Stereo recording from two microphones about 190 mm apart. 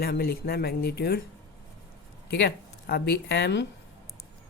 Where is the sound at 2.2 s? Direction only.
60° left (ahead or behind).